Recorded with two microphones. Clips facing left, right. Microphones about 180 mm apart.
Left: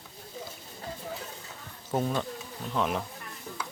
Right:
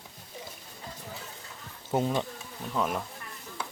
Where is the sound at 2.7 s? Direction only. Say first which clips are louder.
Left 1 dB; centre (ahead or behind).